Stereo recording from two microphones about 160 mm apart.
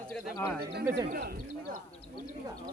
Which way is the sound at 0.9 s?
65° right (ahead or behind).